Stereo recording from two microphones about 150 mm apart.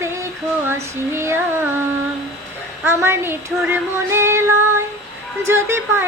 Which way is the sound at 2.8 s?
15° right (ahead or behind).